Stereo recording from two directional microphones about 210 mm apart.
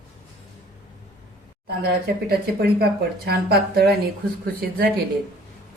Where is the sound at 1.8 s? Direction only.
50° right (ahead or behind).